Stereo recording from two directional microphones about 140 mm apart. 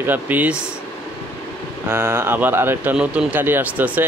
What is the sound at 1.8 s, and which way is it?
Speech, 20° right (ahead or behind).